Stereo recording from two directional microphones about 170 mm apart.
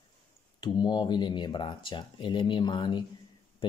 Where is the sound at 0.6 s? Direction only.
25° left (ahead or behind).